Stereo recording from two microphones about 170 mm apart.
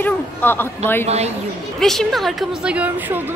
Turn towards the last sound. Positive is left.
turn(degrees=-10)  # may be behind; listen again after turning